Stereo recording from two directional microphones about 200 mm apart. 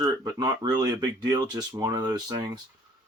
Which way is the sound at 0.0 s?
15° right (ahead or behind).